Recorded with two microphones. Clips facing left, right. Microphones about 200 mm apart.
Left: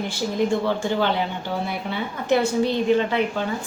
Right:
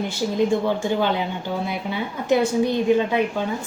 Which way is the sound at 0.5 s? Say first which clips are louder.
Right 1 dB; 15° right (ahead or behind).